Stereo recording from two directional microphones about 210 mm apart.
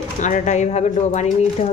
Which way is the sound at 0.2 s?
35° left (ahead or behind).